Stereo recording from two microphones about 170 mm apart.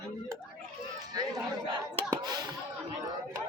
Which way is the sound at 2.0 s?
25° right (ahead or behind).